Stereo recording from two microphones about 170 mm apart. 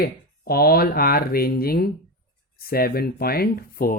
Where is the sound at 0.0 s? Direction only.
65° left (ahead or behind).